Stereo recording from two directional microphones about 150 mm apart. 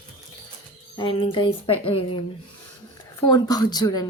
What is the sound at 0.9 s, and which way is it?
A woman's voice, 35° left (ahead or behind).